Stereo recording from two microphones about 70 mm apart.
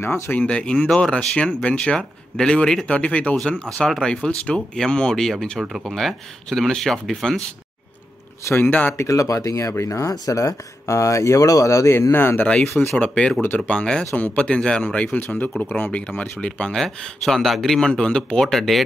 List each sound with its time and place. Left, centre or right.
0.0 s speech: left
0.4 s speech: centre
2.9 s speech: left
8.5 s speech: left
8.9 s speech: left
12.1 s speech: left
13.0 s speech: centre
15.1 s speech: left; by 18.8 s centre